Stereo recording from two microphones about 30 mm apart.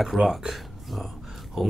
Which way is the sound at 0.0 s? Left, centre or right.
Centre.